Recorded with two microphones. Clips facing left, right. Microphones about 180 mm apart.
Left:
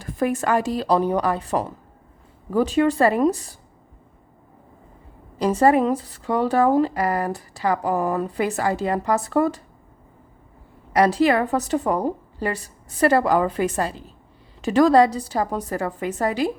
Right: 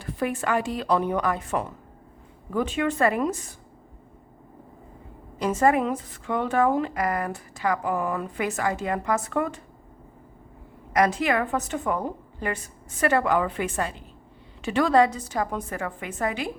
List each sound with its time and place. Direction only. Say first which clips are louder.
0.0 s speech: left 5 dB; 45° left (ahead or behind)
5.4 s speech: left 4 dB; 35° left (ahead or behind)
10.9 s speech: left 5 dB; 30° left (ahead or behind)